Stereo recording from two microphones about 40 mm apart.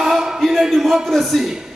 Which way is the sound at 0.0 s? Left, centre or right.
Centre.